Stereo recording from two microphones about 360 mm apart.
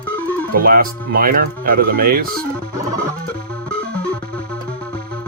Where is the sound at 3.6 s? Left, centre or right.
Centre.